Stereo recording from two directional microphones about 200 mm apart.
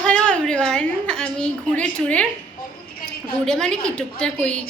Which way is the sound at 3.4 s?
5° left (ahead or behind).